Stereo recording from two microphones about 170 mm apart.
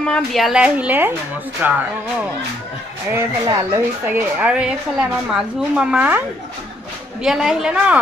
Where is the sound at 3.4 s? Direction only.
20° right (ahead or behind).